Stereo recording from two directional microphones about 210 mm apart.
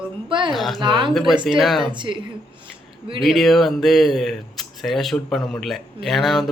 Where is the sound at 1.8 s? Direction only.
25° right (ahead or behind).